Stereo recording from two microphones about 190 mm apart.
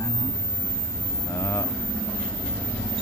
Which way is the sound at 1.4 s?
10° left (ahead or behind).